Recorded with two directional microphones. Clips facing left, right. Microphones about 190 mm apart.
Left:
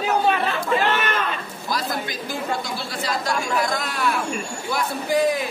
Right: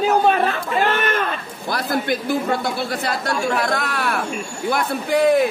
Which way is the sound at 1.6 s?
60° right (ahead or behind).